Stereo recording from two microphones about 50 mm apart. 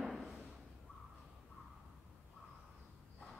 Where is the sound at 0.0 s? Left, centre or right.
Centre.